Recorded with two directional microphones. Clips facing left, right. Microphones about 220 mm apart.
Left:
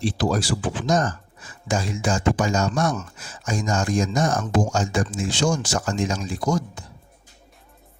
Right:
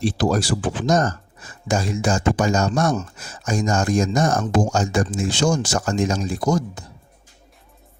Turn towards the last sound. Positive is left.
turn(degrees=-40)  # may be behind; listen again after turning